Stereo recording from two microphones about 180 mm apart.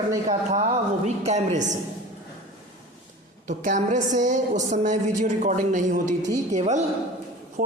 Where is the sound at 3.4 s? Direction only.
45° right (ahead or behind).